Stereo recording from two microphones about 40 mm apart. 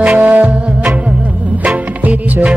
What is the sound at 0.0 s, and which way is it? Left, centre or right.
Music, right.